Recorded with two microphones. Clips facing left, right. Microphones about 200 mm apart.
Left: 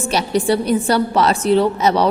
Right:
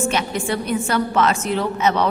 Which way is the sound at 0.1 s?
35° left (ahead or behind).